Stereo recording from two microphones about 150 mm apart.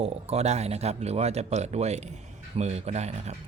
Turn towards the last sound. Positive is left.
turn(degrees=-45)  # may be behind; listen again after turning